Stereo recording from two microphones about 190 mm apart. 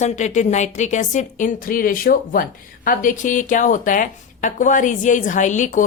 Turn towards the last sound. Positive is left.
turn(degrees=40)  # may be behind; listen again after turning